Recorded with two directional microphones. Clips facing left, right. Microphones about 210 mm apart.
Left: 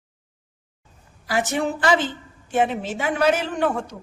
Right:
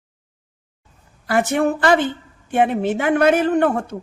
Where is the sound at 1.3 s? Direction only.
60° right (ahead or behind).